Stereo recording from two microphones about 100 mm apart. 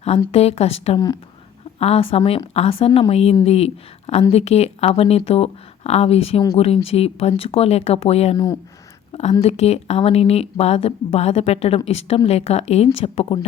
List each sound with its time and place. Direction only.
0.3 s speech: 90° left
1.8 s a woman's voice: 80° left
9.4 s speech: 90° left